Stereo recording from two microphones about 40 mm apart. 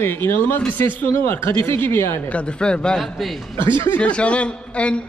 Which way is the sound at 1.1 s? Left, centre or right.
Left.